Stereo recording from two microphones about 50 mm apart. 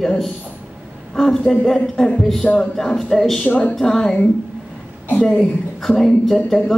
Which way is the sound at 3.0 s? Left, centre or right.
Centre.